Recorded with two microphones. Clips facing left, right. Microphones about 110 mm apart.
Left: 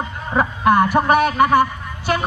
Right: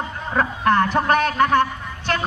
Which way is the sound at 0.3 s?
10° left (ahead or behind).